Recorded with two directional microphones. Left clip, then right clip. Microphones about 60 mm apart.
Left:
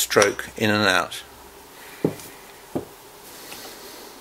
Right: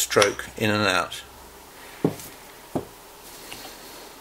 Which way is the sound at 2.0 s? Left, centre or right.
Centre.